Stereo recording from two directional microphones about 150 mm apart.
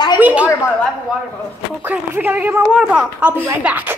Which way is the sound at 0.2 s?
10° right (ahead or behind).